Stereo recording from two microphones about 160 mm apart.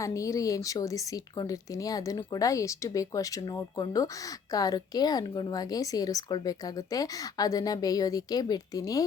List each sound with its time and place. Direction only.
0.0 s speech: 20° left (ahead or behind)